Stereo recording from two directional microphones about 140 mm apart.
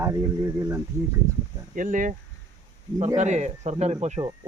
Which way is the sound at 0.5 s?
20° right (ahead or behind).